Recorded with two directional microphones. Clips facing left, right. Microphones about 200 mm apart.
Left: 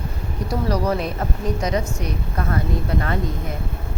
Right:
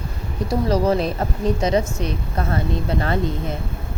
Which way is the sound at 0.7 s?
30° right (ahead or behind).